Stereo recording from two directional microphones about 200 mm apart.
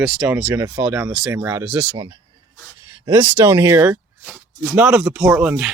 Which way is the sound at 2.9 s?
15° right (ahead or behind).